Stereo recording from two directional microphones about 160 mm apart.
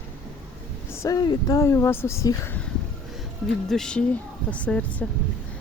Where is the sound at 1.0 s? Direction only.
25° left (ahead or behind).